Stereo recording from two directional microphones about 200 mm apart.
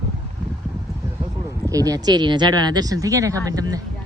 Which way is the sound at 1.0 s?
15° right (ahead or behind).